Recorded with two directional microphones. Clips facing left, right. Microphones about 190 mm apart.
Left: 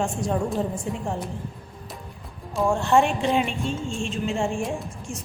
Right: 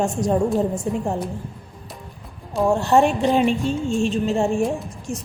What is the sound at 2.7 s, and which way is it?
A woman's voice, 40° right (ahead or behind).